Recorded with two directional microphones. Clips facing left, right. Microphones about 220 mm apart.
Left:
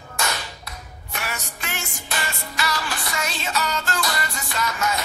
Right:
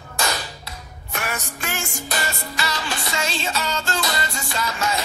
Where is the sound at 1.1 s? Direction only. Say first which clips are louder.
Right 3 dB; 50° right (ahead or behind).